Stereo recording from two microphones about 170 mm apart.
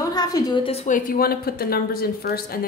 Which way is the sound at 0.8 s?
50° left (ahead or behind).